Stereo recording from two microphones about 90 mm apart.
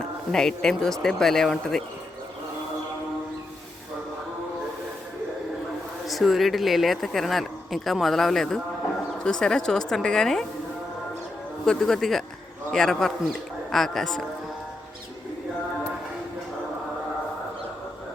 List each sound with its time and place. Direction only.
0.3 s speech: 5° left (ahead or behind)
6.1 s a woman's voice: centre (ahead or behind)
11.6 s speech: 5° left (ahead or behind)